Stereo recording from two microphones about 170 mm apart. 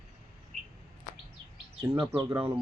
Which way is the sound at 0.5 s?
45° right (ahead or behind).